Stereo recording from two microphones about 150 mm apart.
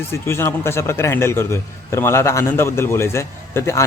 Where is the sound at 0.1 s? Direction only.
15° left (ahead or behind).